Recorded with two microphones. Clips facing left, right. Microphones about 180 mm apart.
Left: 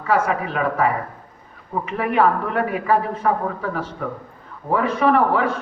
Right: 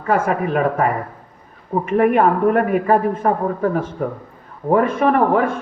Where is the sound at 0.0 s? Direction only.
50° right (ahead or behind).